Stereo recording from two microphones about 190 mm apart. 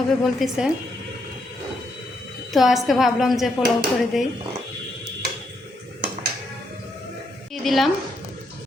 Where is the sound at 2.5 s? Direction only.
Centre (ahead or behind).